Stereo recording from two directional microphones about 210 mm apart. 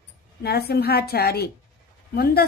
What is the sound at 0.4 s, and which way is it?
A woman's voice, 50° left (ahead or behind).